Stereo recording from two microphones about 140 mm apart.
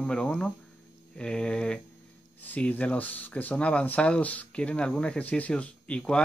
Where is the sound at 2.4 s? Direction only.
10° left (ahead or behind).